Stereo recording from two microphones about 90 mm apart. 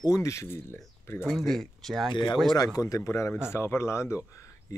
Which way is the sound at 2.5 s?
40° left (ahead or behind).